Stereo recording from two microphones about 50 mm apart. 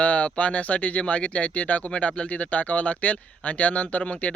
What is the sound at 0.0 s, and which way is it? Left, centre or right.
Speech, left.